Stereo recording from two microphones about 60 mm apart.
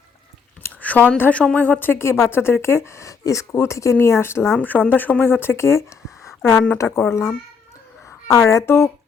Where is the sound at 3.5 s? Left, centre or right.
Left.